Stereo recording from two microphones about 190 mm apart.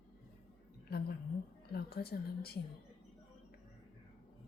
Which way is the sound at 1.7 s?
55° left (ahead or behind).